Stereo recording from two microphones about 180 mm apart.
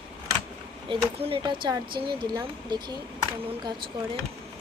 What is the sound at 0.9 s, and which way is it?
Speech, 25° right (ahead or behind).